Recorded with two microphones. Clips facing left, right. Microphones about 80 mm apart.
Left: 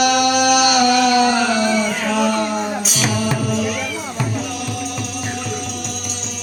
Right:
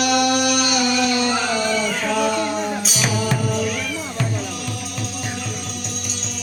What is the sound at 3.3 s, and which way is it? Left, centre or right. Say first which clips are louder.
Music: left 2 dB; centre.